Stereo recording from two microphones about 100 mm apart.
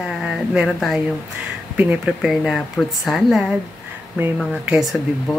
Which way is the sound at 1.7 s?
15° right (ahead or behind).